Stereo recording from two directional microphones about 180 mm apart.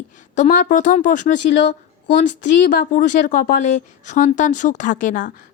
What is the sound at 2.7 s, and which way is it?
A woman's voice, 45° left (ahead or behind).